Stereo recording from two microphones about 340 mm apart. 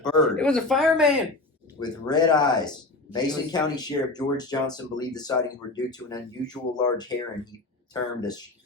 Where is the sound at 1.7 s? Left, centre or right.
Centre.